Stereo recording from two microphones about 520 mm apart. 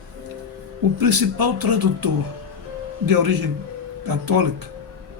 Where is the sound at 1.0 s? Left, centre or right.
Right.